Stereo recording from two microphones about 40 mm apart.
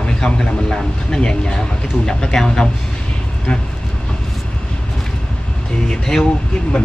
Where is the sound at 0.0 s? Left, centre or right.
Centre.